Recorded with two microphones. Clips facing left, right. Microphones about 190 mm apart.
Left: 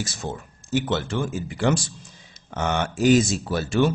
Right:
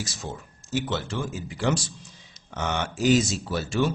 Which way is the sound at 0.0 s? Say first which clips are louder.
Left 4 dB; 55° left (ahead or behind).